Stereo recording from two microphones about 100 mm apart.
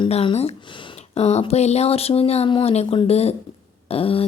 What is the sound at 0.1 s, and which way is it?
Speech, 90° left.